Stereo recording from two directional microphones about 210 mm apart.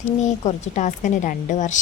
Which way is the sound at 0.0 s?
35° left (ahead or behind).